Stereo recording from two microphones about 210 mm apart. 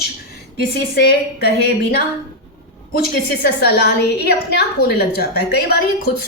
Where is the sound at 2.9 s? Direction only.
50° left (ahead or behind).